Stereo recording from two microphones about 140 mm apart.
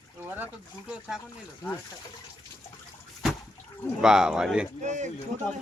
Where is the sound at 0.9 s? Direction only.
5° right (ahead or behind).